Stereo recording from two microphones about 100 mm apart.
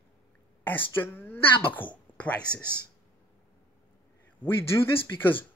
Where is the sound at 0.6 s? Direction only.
20° left (ahead or behind).